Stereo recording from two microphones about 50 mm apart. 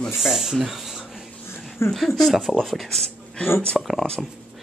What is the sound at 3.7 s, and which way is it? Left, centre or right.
Speech, centre.